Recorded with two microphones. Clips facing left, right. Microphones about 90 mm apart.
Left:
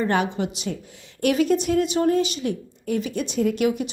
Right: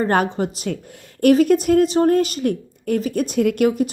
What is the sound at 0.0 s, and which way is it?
A woman's voice, 40° right (ahead or behind).